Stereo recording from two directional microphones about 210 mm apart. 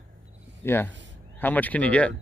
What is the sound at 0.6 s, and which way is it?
Speech, 10° left (ahead or behind).